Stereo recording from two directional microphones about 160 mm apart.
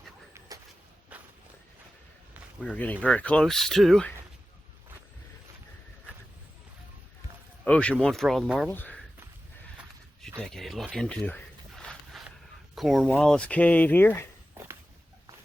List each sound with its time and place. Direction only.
0.3 s a sound: 20° right (ahead or behind)
1.1 s walk: 10° right (ahead or behind)
2.6 s speech: 10° left (ahead or behind)
7.6 s speech: 5° left (ahead or behind)
8.7 s speech: 10° left (ahead or behind)
10.5 s speech: centre (ahead or behind)
11.8 s a sound: 5° left (ahead or behind)
12.7 s speech: centre (ahead or behind)
14.6 s a sound: 15° right (ahead or behind)